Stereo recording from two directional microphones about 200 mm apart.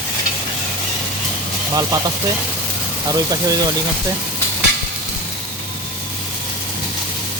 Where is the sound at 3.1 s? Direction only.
20° right (ahead or behind).